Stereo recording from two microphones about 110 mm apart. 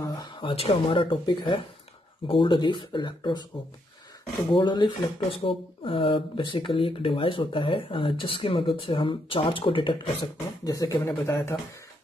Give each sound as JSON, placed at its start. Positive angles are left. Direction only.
{"t": 0.2, "sound": "speech", "side_deg": 55}
{"t": 4.5, "sound": "speech", "side_deg": 45}
{"t": 10.6, "sound": "speech", "side_deg": 35}
{"t": 11.2, "sound": "speech", "side_deg": 20}